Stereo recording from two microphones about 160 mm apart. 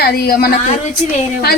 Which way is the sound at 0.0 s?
85° left.